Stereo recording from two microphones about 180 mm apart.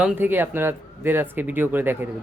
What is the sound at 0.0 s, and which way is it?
A man's voice, 10° right (ahead or behind).